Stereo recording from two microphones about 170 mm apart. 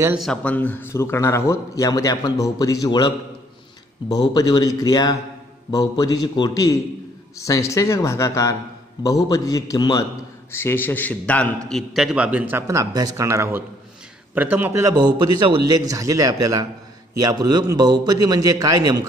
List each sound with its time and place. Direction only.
0.2 s a man's voice: 5° left (ahead or behind); by 3.1 s 25° left (ahead or behind)
4.3 s a man's voice: 25° left (ahead or behind)
10.5 s a man's voice: 15° left (ahead or behind); by 19.0 s 20° right (ahead or behind)